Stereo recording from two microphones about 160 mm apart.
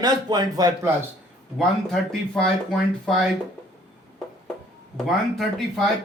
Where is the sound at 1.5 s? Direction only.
Centre (ahead or behind).